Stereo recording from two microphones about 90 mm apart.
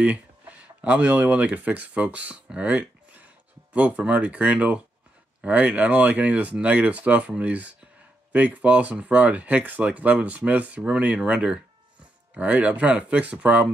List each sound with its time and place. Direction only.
0.0 s speech: 15° right (ahead or behind)